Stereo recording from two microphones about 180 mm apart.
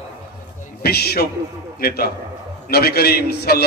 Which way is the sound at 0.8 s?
60° left (ahead or behind).